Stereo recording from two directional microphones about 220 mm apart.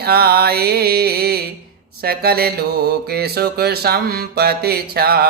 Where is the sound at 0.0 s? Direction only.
45° right (ahead or behind).